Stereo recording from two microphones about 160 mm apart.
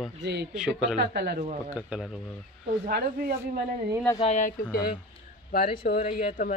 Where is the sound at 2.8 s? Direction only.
70° right (ahead or behind).